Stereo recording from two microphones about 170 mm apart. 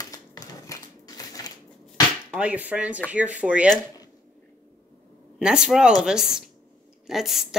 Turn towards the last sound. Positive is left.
turn(degrees=0)  # may be behind; listen again after turning